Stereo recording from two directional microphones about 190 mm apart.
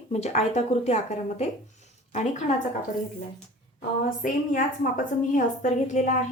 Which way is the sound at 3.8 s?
45° left (ahead or behind).